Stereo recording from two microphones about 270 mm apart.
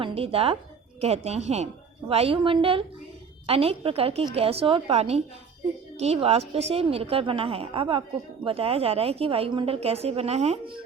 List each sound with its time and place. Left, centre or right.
0.0 s a woman's voice: right